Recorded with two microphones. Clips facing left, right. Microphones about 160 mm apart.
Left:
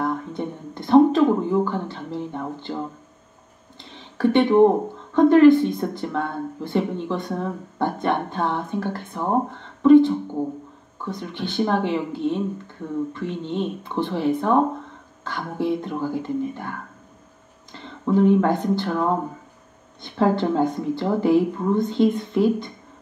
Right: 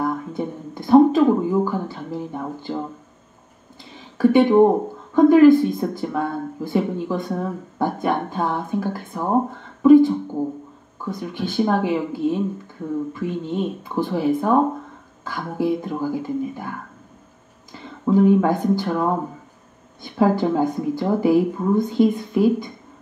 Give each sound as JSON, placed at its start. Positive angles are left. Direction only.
{"t": 0.0, "sound": "speech", "side_deg": -5}
{"t": 4.2, "sound": "speech", "side_deg": -5}
{"t": 17.7, "sound": "speech", "side_deg": -5}